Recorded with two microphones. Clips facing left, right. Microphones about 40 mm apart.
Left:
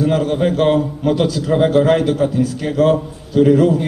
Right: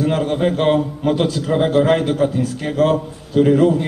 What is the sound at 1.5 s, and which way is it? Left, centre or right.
A man's voice, centre.